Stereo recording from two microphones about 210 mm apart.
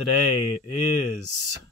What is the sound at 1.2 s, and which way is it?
Speech, 55° right (ahead or behind).